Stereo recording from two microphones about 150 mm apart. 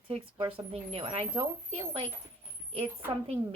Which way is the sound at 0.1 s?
35° right (ahead or behind).